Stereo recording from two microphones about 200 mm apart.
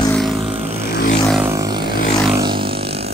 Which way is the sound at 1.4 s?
15° right (ahead or behind).